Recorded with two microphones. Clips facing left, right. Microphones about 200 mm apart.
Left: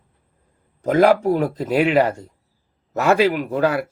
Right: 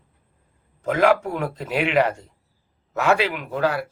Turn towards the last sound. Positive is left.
turn(degrees=45)  # may be behind; listen again after turning